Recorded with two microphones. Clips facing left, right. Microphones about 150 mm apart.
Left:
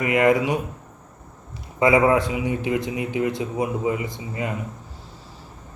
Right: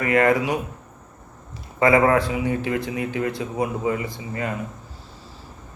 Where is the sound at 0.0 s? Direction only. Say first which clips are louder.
Even; 15° left (ahead or behind).